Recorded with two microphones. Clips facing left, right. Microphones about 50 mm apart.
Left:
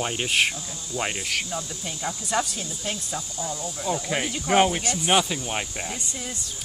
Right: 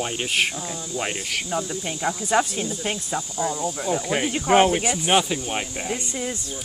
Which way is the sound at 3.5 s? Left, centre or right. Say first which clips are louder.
Right 4 dB; centre.